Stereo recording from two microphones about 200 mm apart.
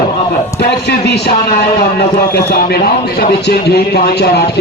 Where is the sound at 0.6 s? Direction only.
55° left (ahead or behind).